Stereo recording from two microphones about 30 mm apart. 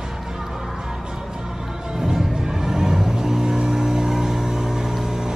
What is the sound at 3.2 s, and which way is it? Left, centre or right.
Vehicle, centre.